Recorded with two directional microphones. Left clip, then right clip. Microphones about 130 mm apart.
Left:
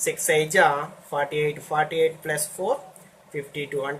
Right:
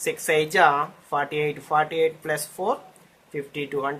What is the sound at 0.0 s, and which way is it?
Speech, 40° right (ahead or behind).